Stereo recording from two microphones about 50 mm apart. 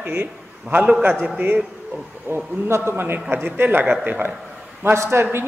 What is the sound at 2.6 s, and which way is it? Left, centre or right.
Speech, right.